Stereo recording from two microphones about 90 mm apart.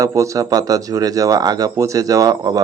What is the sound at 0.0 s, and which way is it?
Speech, 40° right (ahead or behind).